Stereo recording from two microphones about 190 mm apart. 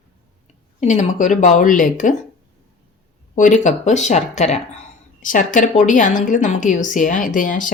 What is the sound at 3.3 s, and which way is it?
A woman's voice, 40° left (ahead or behind).